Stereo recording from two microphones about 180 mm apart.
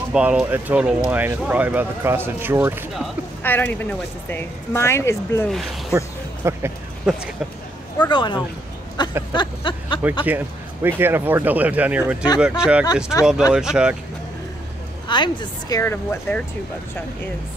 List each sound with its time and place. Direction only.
0.1 s speech: 5° right (ahead or behind)
3.4 s speech: 10° left (ahead or behind)
5.5 s speech: centre (ahead or behind)
5.9 s music: 15° right (ahead or behind)
7.1 s speech: 5° right (ahead or behind)
8.1 s a woman's voice: 25° left (ahead or behind)
10.2 s speech: 10° right (ahead or behind)
15.0 s a woman's voice: 25° left (ahead or behind)
15.8 s speech: 10° left (ahead or behind)